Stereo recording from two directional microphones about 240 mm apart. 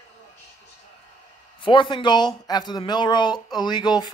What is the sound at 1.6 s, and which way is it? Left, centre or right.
Speech, left.